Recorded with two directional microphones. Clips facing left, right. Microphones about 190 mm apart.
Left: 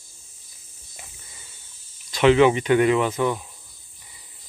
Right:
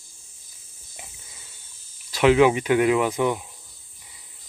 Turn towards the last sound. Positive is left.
turn(degrees=-15)  # may be behind; listen again after turning